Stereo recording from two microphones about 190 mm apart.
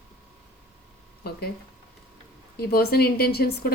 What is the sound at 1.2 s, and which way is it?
Speech, 55° left (ahead or behind).